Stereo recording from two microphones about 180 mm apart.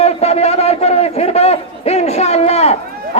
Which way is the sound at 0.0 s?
35° left (ahead or behind).